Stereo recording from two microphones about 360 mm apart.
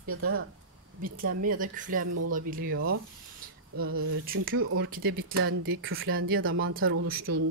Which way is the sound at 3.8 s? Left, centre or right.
Right.